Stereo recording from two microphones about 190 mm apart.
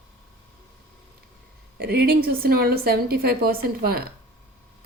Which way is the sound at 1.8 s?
55° right (ahead or behind).